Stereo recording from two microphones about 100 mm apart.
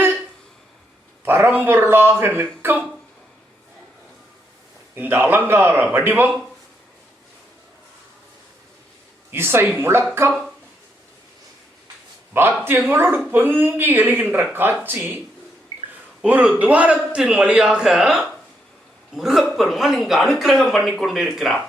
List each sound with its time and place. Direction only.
1.2 s speech: 20° right (ahead or behind)
4.9 s speech: 20° right (ahead or behind)
9.3 s speech: 25° right (ahead or behind)
12.3 s speech: 20° right (ahead or behind)
16.2 s speech: 15° right (ahead or behind)